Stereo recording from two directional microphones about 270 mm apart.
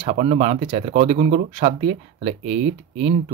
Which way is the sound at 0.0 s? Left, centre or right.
Right.